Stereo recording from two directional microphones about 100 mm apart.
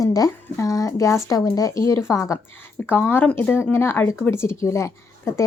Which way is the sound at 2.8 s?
20° left (ahead or behind).